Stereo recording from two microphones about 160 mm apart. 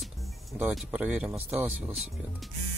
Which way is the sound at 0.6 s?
5° right (ahead or behind).